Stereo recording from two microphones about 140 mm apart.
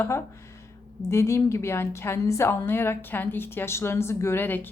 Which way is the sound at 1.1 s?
20° left (ahead or behind).